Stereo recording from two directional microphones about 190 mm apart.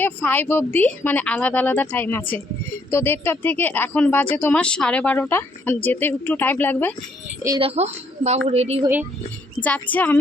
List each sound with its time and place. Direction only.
0.0 s speech: 10° left (ahead or behind)
7.6 s a woman's voice: 30° right (ahead or behind)
9.6 s a woman's voice: 35° left (ahead or behind)
9.9 s speech: 10° left (ahead or behind)